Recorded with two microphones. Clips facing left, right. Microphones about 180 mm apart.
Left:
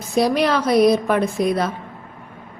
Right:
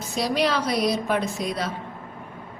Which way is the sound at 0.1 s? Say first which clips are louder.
Left 6 dB; 55° left (ahead or behind).